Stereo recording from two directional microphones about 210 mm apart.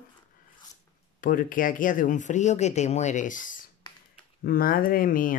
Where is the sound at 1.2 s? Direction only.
40° left (ahead or behind).